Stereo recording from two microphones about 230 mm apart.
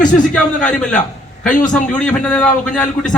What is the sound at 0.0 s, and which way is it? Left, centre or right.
Speech, left.